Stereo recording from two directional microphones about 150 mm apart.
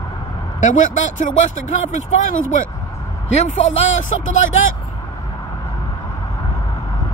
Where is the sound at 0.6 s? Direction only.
55° left (ahead or behind).